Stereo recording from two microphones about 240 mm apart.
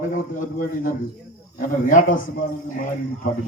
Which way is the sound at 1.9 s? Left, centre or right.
Left.